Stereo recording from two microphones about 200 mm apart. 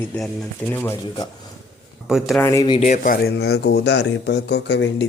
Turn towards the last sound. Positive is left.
turn(degrees=60)  # may be behind; listen again after turning